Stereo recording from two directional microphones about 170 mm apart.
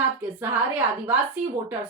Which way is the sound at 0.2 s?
10° right (ahead or behind).